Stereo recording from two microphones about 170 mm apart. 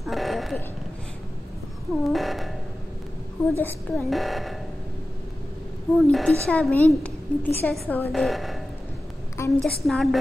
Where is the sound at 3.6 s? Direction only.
10° left (ahead or behind).